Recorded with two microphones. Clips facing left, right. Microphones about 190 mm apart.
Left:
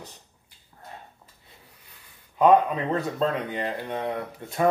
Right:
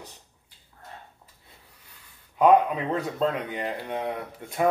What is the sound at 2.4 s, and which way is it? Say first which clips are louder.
Speech: even; 5° right (ahead or behind).